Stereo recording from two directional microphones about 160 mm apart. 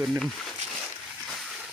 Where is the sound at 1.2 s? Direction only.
Centre (ahead or behind).